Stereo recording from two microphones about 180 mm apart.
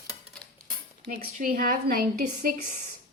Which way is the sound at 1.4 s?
50° right (ahead or behind).